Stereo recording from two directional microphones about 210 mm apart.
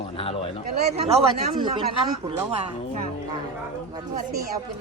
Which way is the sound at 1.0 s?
30° right (ahead or behind).